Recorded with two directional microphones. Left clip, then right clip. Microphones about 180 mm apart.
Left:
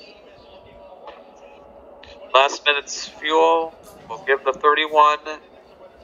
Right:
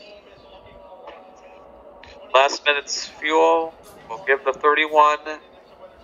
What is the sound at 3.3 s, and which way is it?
Speech, centre (ahead or behind).